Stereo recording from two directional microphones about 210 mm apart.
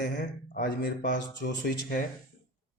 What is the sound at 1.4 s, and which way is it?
Speech, 50° left (ahead or behind).